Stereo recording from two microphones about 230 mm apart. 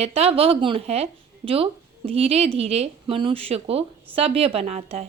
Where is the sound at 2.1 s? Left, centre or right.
Right.